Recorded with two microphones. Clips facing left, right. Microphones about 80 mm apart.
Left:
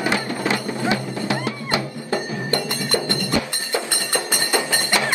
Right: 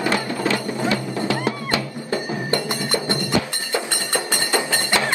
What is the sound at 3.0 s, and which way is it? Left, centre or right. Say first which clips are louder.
Music: right 1 dB; right.